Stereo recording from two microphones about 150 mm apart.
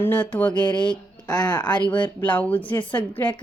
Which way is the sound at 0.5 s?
30° left (ahead or behind).